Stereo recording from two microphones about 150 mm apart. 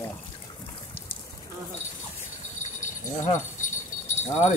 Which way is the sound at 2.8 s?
55° left (ahead or behind).